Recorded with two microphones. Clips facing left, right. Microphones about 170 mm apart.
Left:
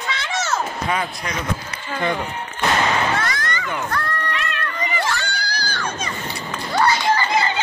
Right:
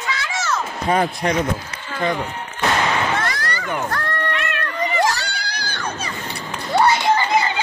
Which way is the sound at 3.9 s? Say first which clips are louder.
Right 1 dB; 50° right (ahead or behind).